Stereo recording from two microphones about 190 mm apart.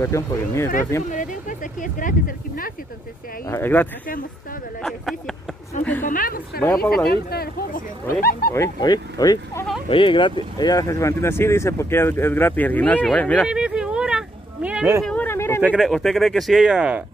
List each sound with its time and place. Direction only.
0.0 s speech: 15° left (ahead or behind)
1.1 s speech: 45° left (ahead or behind)
3.4 s speech: 10° left (ahead or behind)
5.7 s speech: 40° left (ahead or behind)
8.5 s speech: 20° left (ahead or behind)
13.4 s a sound: 5° right (ahead or behind)
15.0 s a sound: 10° left (ahead or behind)
15.6 s speech: 5° right (ahead or behind)